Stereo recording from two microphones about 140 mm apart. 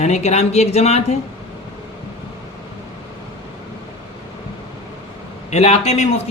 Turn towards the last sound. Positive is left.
turn(degrees=50)  # may be behind; listen again after turning